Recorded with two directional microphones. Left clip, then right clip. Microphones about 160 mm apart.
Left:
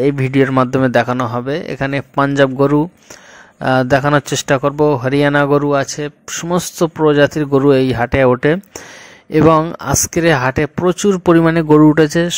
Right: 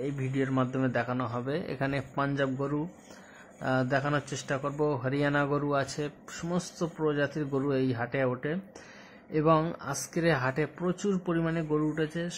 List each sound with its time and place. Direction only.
0.0 s a man's voice: 70° left (ahead or behind); by 6.3 s 40° left (ahead or behind)
6.5 s speech: 55° left (ahead or behind)